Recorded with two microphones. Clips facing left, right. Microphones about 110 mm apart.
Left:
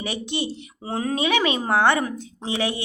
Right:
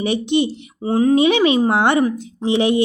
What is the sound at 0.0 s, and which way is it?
A woman's voice, 20° right (ahead or behind).